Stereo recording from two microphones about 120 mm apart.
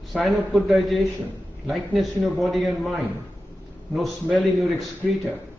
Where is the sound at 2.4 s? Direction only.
Centre (ahead or behind).